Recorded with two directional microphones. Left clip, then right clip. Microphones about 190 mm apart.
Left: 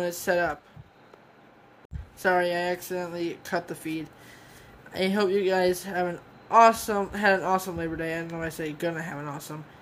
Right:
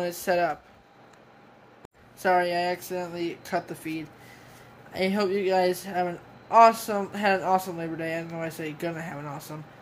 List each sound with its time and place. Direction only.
0.0 s a woman's voice: 15° left (ahead or behind)
2.1 s a woman's voice: 15° left (ahead or behind)